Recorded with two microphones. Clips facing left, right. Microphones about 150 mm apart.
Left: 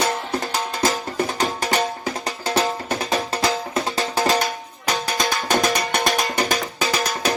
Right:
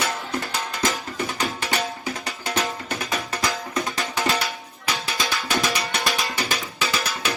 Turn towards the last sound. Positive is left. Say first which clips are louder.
# left 4 dB
turn(degrees=40)  # may be behind; listen again after turning